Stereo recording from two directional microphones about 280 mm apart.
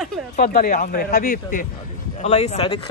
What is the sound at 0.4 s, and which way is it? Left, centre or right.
Speech, left.